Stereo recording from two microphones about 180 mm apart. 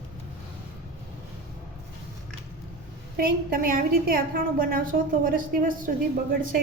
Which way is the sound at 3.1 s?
50° right (ahead or behind).